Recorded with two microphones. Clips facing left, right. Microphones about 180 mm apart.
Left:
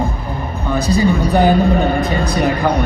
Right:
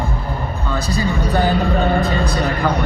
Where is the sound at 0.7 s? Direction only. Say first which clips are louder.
Left 7 dB; 15° left (ahead or behind).